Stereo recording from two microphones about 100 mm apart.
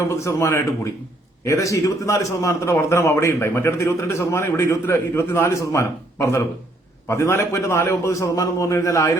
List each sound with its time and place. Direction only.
0.1 s a man's voice: 30° left (ahead or behind)